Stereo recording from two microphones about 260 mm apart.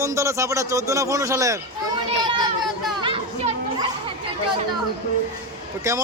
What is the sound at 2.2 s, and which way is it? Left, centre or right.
Children playing, centre.